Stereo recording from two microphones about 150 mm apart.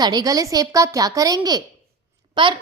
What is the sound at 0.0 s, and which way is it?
A woman's voice, 25° right (ahead or behind).